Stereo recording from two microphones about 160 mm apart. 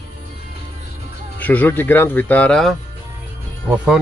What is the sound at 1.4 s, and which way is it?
Speech, 10° left (ahead or behind).